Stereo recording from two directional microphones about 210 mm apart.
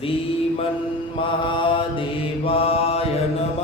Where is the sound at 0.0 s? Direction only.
25° left (ahead or behind).